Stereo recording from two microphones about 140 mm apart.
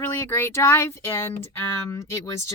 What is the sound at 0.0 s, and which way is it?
A woman's voice, 15° left (ahead or behind).